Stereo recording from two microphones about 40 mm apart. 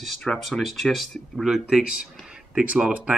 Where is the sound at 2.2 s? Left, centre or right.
Centre.